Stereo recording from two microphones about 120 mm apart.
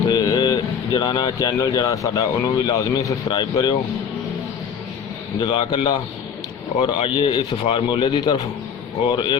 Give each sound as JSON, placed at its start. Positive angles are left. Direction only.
{"t": 0.1, "sound": "speech", "side_deg": 35}
{"t": 5.4, "sound": "a man's voice", "side_deg": 45}